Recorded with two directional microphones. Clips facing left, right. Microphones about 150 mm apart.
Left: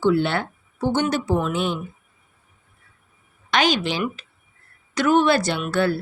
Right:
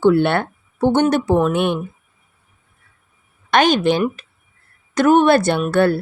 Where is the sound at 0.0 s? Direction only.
55° right (ahead or behind).